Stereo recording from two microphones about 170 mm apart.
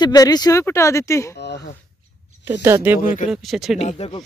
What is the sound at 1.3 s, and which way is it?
Speech, 80° left.